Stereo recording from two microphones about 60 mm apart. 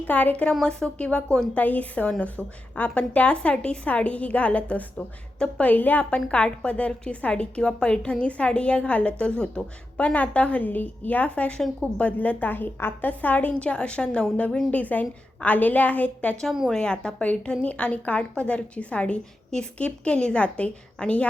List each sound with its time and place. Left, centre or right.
0.1 s a woman's voice: left
10.2 s a woman's voice: left
16.5 s a woman's voice: centre
16.7 s a woman's voice: centre